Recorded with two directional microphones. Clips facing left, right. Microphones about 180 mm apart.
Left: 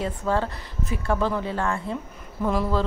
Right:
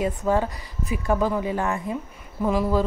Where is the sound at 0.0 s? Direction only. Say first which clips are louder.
Right 3 dB; 15° right (ahead or behind).